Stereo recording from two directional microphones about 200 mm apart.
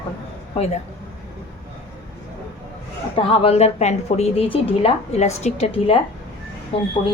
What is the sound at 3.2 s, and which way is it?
A woman's voice, 30° left (ahead or behind).